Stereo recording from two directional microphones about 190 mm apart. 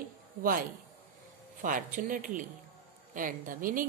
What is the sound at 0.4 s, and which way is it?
A man's voice, 50° right (ahead or behind).